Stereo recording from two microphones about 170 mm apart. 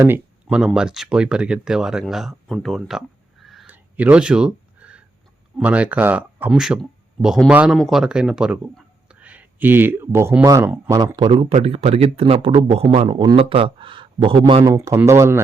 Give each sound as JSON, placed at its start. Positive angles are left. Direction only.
{"t": 0.4, "sound": "speech", "side_deg": 0}
{"t": 3.4, "sound": "a sound", "side_deg": 0}
{"t": 5.5, "sound": "speech", "side_deg": -5}
{"t": 14.6, "sound": "speech", "side_deg": -20}